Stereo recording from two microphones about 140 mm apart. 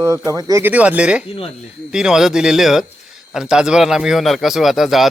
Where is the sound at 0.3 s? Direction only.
25° right (ahead or behind).